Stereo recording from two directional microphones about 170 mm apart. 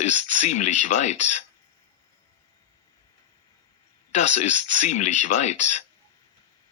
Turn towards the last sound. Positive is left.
turn(degrees=40)  # may be behind; listen again after turning